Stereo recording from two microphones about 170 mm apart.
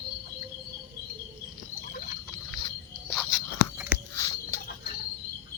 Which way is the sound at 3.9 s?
70° left (ahead or behind).